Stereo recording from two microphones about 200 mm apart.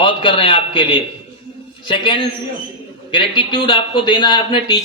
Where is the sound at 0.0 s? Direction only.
25° left (ahead or behind).